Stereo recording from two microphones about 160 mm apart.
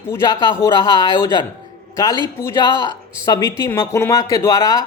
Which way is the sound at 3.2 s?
20° left (ahead or behind).